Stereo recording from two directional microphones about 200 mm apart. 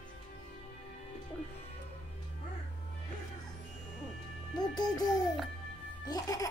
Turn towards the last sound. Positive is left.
turn(degrees=15)  # may be behind; listen again after turning